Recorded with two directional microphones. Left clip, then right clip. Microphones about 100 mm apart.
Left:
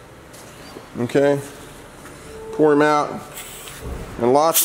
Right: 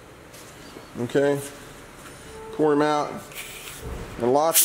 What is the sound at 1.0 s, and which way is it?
Speech, 15° left (ahead or behind).